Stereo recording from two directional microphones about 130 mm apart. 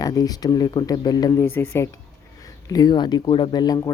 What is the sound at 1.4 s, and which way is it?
Speech, 15° left (ahead or behind).